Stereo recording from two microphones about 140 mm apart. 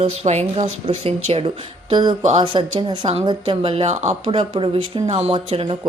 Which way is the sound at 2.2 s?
50° right (ahead or behind).